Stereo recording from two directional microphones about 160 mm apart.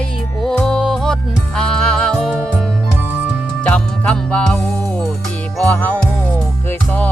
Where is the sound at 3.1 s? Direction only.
10° right (ahead or behind).